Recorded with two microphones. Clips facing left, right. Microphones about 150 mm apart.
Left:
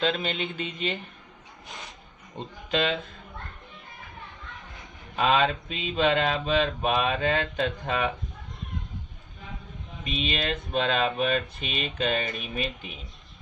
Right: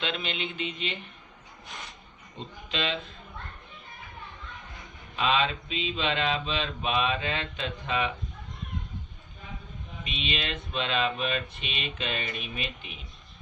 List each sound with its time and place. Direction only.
0.0 s mantra: 40° left (ahead or behind)
2.4 s mantra: 50° left (ahead or behind)
4.5 s a sound: centre (ahead or behind)
5.1 s mantra: 45° left (ahead or behind)
10.0 s mantra: 40° left (ahead or behind)